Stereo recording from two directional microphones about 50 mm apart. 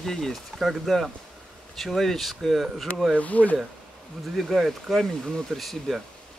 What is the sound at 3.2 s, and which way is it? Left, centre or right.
Speech, left.